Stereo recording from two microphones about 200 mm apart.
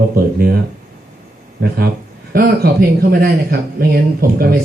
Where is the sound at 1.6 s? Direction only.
50° right (ahead or behind).